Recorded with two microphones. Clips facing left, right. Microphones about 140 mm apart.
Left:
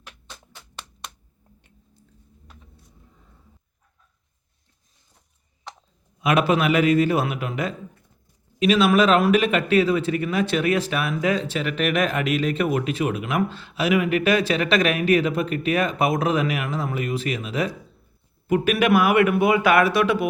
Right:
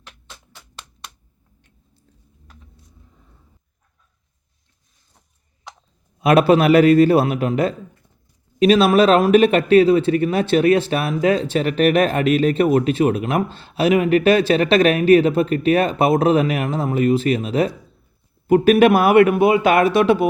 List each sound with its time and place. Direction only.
6.2 s speech: 35° right (ahead or behind)